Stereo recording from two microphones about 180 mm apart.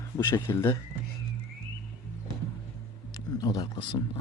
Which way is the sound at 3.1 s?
20° left (ahead or behind).